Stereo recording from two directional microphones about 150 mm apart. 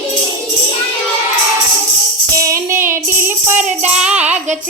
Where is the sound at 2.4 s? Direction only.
20° right (ahead or behind).